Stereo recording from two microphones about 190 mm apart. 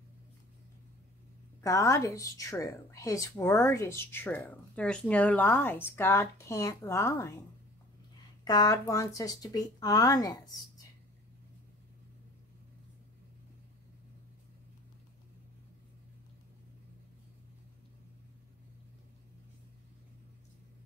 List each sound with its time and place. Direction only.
1.6 s a woman's voice: 15° left (ahead or behind)
8.5 s speech: 20° left (ahead or behind)